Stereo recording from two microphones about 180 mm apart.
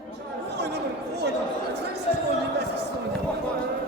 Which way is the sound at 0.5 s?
65° right (ahead or behind).